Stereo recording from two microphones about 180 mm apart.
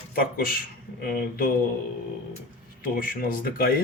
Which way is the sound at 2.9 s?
50° left (ahead or behind).